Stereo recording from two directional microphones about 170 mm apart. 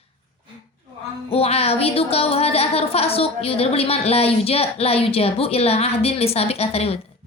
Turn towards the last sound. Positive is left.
turn(degrees=35)  # may be behind; listen again after turning